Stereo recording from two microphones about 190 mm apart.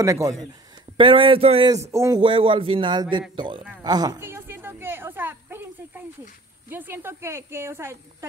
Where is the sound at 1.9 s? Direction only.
15° right (ahead or behind).